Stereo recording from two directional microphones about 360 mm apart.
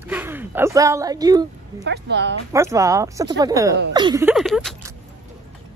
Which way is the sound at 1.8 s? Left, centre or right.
Right.